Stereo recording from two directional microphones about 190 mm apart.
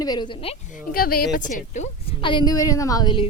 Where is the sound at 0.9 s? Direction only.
50° left (ahead or behind).